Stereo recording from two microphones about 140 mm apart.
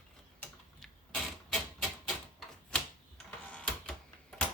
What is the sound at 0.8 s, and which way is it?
Typewriter, 5° left (ahead or behind).